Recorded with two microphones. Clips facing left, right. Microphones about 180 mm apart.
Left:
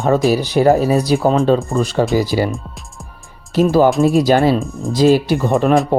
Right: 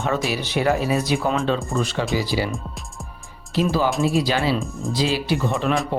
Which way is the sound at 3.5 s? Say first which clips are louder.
Left 8 dB; 45° left (ahead or behind).